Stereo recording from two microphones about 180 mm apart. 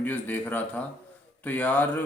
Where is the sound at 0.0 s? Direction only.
10° left (ahead or behind).